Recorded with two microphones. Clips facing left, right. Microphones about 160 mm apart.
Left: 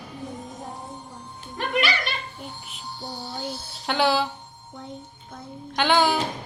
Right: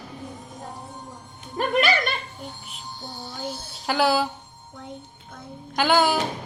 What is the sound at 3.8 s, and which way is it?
Speech, 5° right (ahead or behind).